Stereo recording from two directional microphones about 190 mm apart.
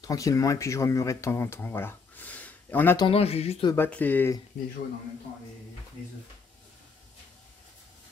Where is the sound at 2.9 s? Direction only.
25° left (ahead or behind).